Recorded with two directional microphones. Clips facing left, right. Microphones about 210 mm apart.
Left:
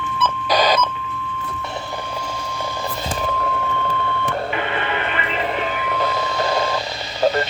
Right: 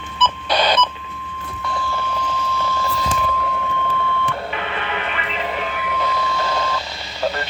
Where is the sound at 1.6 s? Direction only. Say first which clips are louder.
Right 6 dB; 20° left (ahead or behind).